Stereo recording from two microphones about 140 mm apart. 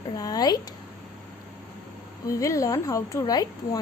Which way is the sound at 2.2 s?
25° left (ahead or behind).